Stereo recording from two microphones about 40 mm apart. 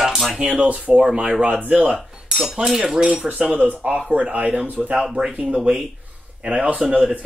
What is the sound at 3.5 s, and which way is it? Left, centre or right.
Speech, right.